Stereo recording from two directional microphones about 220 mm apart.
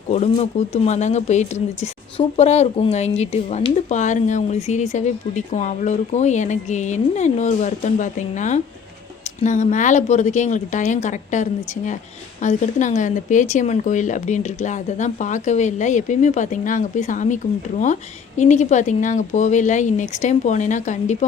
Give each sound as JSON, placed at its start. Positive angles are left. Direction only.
{"t": 0.1, "sound": "speech", "side_deg": 30}